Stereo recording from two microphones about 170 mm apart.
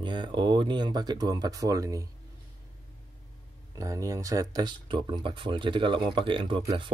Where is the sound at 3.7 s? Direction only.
20° right (ahead or behind).